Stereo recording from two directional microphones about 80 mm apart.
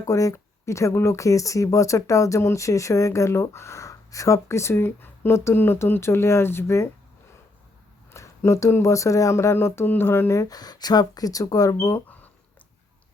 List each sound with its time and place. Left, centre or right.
0.0 s speech: left
8.1 s speech: left
10.3 s speech: left
11.9 s a sound: left